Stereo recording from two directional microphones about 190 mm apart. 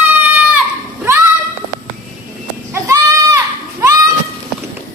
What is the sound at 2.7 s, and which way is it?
Goat, 15° right (ahead or behind).